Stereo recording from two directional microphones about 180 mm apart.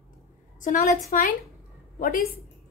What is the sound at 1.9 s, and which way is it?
Speech, 55° left (ahead or behind).